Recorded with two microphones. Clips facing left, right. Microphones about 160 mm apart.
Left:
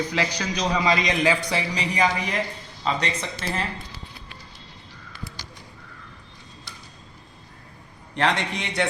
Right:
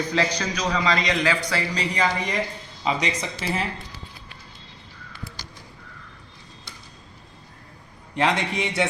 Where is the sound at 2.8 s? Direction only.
10° right (ahead or behind).